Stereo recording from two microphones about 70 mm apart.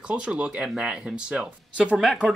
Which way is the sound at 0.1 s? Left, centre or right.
Centre.